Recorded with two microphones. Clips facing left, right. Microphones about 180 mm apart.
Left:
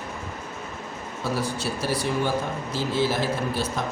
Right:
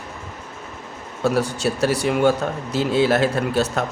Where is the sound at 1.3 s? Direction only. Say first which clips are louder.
Right 6 dB; 75° right (ahead or behind).